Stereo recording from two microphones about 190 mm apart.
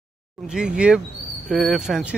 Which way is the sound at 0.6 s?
5° right (ahead or behind).